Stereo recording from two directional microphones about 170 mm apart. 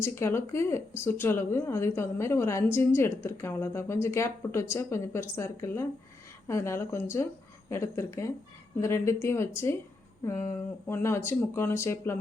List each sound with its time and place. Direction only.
0.0 s speech: 15° left (ahead or behind)